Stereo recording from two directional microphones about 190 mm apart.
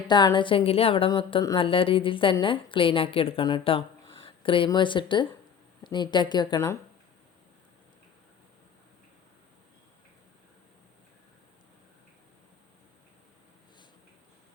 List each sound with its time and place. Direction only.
0.1 s a woman's voice: 25° left (ahead or behind)